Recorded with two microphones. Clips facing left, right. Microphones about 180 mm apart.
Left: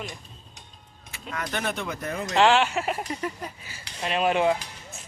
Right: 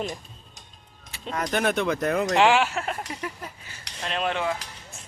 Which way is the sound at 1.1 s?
30° right (ahead or behind).